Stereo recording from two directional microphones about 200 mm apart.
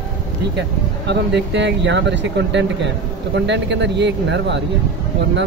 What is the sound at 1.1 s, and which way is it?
Speech, 60° right (ahead or behind).